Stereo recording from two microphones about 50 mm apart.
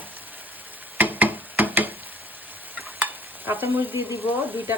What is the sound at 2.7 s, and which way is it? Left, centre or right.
Stir, right.